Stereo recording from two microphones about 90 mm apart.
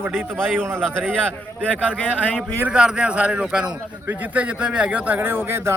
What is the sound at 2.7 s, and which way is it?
A man's voice, 10° right (ahead or behind).